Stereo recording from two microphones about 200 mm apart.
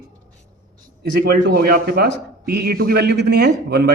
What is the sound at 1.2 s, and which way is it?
A man's voice, 50° right (ahead or behind).